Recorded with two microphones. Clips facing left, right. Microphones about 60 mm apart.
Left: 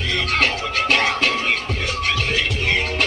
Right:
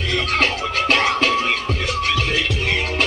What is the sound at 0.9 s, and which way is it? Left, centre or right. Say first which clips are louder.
Music: right 2 dB; centre.